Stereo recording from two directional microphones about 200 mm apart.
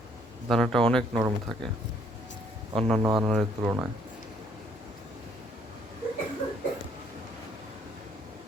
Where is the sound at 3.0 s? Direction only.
20° right (ahead or behind).